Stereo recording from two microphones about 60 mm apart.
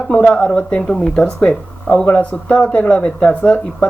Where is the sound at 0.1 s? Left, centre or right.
Centre.